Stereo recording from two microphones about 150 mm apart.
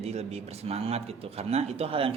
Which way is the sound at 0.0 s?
45° right (ahead or behind).